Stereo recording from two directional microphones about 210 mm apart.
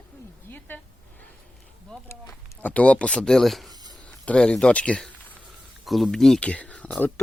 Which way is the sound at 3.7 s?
20° right (ahead or behind).